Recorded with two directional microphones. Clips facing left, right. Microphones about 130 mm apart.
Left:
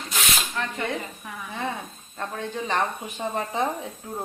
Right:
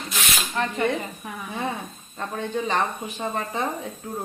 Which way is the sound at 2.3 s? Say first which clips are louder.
Right 4 dB; 5° right (ahead or behind).